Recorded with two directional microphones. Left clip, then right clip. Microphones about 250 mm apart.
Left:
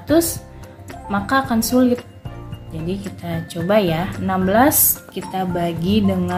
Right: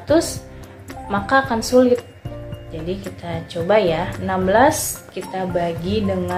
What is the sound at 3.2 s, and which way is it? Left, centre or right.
Speech, left.